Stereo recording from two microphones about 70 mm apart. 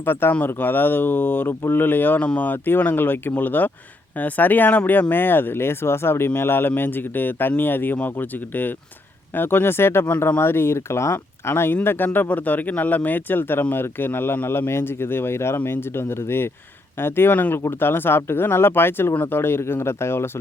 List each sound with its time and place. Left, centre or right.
0.0 s speech: left